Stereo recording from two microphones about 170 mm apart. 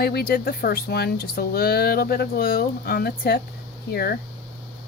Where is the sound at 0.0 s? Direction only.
65° left (ahead or behind).